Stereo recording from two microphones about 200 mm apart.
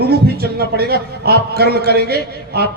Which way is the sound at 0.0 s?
50° right (ahead or behind).